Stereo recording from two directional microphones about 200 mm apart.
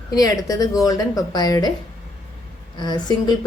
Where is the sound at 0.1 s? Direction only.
20° left (ahead or behind).